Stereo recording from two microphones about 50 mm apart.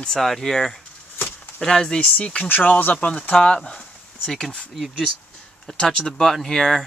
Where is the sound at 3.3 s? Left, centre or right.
Centre.